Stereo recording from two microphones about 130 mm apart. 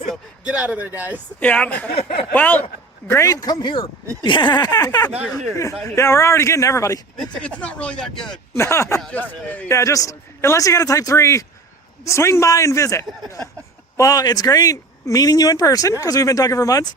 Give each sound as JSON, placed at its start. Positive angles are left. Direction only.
{"t": 0.4, "sound": "speech", "side_deg": -10}
{"t": 1.4, "sound": "speech", "side_deg": 10}
{"t": 2.0, "sound": "speech", "side_deg": 50}
{"t": 2.3, "sound": "speech", "side_deg": 15}
{"t": 7.2, "sound": "speech", "side_deg": 10}
{"t": 8.5, "sound": "speech", "side_deg": 20}
{"t": 9.0, "sound": "speech", "side_deg": 10}